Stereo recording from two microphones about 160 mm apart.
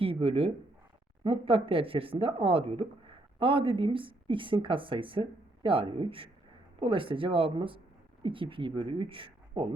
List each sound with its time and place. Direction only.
0.0 s speech: 35° right (ahead or behind)